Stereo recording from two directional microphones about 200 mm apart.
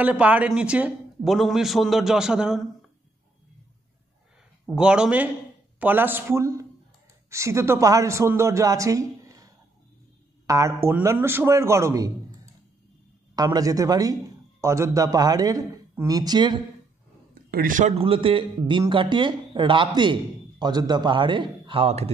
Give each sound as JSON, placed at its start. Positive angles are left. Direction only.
{"t": 0.0, "sound": "a man's voice", "side_deg": -5}
{"t": 4.6, "sound": "a man's voice", "side_deg": -5}
{"t": 13.4, "sound": "a man's voice", "side_deg": -20}
{"t": 17.3, "sound": "a man's voice", "side_deg": -45}